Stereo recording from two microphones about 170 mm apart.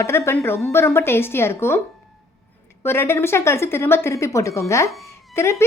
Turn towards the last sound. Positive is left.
turn(degrees=15)  # may be behind; listen again after turning